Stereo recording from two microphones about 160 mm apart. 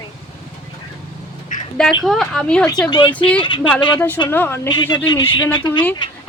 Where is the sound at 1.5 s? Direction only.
55° left (ahead or behind).